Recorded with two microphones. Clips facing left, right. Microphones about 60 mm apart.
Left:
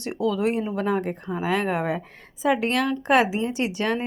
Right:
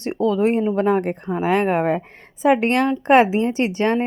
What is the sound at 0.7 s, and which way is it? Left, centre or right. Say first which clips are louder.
A woman's voice: right 6 dB; right.